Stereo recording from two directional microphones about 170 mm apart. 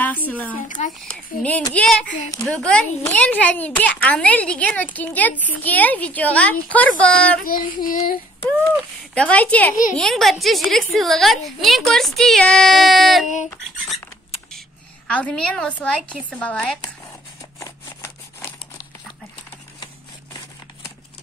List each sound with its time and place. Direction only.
0.0 s speech: 10° left (ahead or behind)
0.6 s speech: 50° left (ahead or behind)
1.0 s a woman's voice: 10° left (ahead or behind)
7.4 s child singing: 55° left (ahead or behind)
9.1 s a woman's voice: 5° left (ahead or behind)
15.0 s speech: 10° left (ahead or behind)
17.6 s crumpling: 15° left (ahead or behind)